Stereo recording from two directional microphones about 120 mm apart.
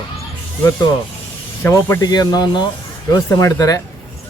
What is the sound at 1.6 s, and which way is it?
Speech, 20° left (ahead or behind).